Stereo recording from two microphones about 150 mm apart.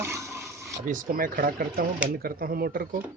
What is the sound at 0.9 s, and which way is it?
Speech, 65° right (ahead or behind).